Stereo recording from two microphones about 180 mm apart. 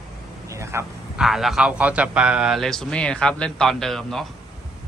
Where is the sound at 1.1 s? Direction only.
Centre (ahead or behind).